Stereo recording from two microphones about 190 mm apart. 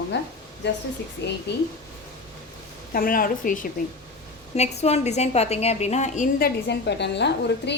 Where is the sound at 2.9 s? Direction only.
50° left (ahead or behind).